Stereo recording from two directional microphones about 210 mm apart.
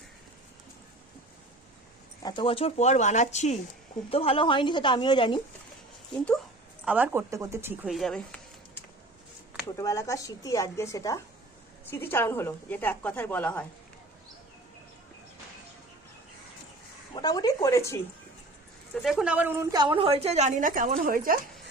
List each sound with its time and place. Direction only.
2.2 s a woman's voice: 25° left (ahead or behind)
6.1 s speech: 5° left (ahead or behind)
6.8 s a woman's voice: 10° right (ahead or behind); by 13.7 s 10° left (ahead or behind)
17.2 s a woman's voice: 20° left (ahead or behind)
19.0 s a woman's voice: 5° right (ahead or behind); by 21.3 s 40° right (ahead or behind)